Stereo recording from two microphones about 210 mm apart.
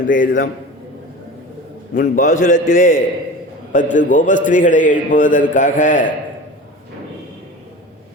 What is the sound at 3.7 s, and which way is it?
A man's voice, 40° left (ahead or behind).